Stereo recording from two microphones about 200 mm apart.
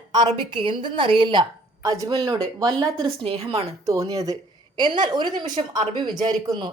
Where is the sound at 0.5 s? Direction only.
25° right (ahead or behind).